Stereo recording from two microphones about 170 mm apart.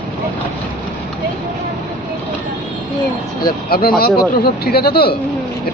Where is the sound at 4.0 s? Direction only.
65° left (ahead or behind).